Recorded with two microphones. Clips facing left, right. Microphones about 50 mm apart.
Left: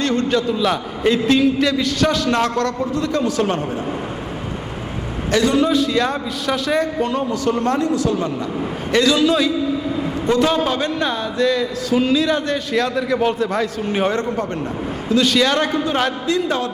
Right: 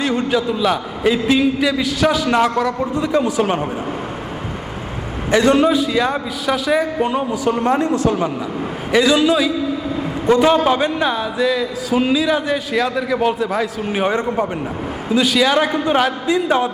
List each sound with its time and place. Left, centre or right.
0.0 s a man's voice: centre
5.4 s a man's voice: right
5.6 s a man's voice: centre; by 8.2 s right
8.9 s a man's voice: centre
14.1 s a man's voice: centre